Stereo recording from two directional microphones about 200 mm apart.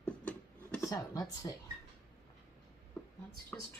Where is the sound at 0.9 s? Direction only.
15° left (ahead or behind).